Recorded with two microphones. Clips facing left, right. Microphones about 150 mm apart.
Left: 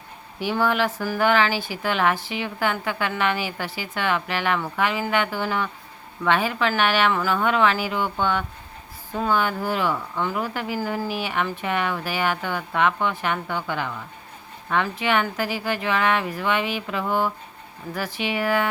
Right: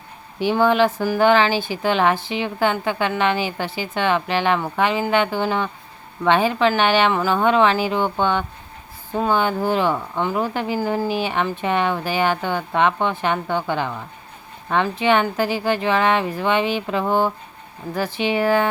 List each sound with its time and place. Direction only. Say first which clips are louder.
0.3 s speech: right 6 dB; 20° right (ahead or behind)